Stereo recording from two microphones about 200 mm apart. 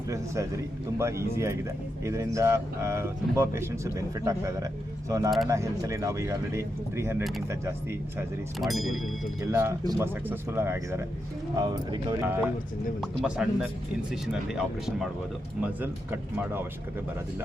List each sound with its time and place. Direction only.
0.9 s speech: 15° right (ahead or behind)
8.6 s speech: centre (ahead or behind)
9.5 s speech: 10° right (ahead or behind)
12.2 s speech: 10° right (ahead or behind)